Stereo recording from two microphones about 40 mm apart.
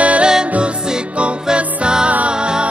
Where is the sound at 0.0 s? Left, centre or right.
Right.